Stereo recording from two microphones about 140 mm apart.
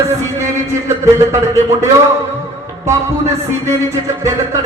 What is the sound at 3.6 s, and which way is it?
Speech, 20° right (ahead or behind).